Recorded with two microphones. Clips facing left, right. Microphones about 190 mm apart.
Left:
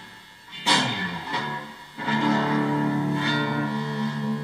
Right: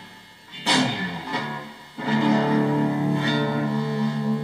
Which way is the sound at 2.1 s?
35° right (ahead or behind).